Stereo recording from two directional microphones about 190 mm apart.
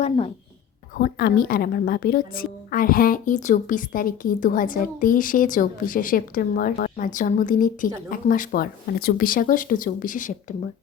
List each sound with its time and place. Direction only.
0.9 s a woman's voice: 50° left (ahead or behind)